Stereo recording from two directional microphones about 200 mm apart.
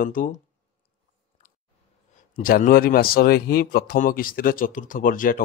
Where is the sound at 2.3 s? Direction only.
45° left (ahead or behind).